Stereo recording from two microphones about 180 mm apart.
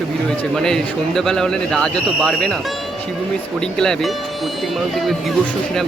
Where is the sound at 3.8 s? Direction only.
5° left (ahead or behind).